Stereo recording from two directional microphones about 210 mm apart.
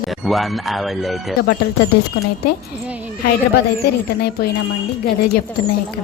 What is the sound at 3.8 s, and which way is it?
Speech, 50° left (ahead or behind).